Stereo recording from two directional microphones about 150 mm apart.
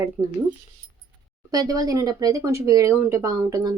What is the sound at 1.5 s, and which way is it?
Speech, 25° right (ahead or behind).